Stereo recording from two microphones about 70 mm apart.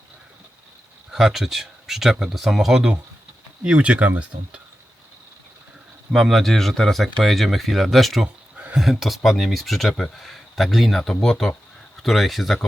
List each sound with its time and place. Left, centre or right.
1.1 s speech: centre
6.1 s speech: centre